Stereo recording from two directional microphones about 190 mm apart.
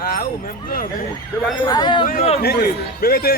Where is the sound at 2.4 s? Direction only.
55° left (ahead or behind).